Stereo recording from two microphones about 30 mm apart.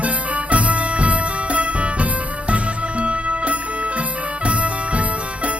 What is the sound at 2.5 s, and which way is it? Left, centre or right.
Music, right.